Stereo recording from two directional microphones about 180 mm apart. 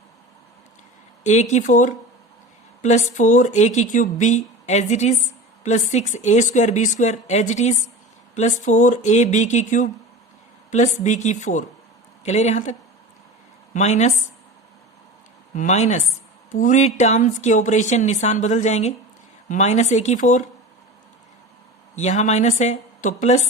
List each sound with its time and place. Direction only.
1.2 s a woman's voice: 40° left (ahead or behind)
13.7 s speech: 40° left (ahead or behind)
15.5 s speech: 40° left (ahead or behind)
21.9 s speech: 40° left (ahead or behind)